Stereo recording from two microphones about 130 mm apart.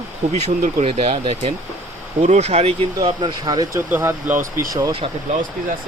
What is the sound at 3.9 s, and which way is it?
Speech, 15° right (ahead or behind).